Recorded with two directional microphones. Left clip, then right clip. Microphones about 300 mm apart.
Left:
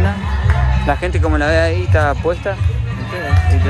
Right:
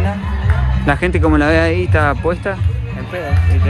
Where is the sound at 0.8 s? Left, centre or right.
Right.